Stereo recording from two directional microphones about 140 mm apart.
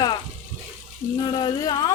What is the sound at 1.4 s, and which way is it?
Speech, 30° left (ahead or behind).